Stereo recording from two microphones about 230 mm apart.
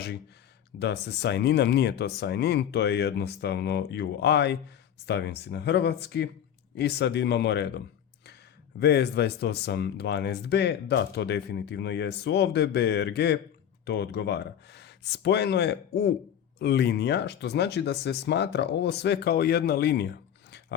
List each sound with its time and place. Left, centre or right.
0.8 s speech: left
8.8 s speech: left